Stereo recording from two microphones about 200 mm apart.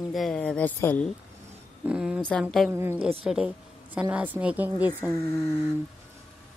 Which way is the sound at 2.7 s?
10° right (ahead or behind).